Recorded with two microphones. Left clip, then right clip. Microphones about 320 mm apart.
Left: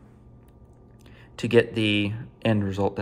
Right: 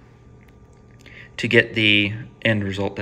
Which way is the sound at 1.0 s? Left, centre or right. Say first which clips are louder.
Right 6 dB; centre.